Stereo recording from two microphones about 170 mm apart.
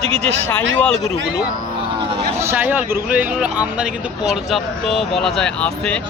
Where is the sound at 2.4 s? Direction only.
15° right (ahead or behind).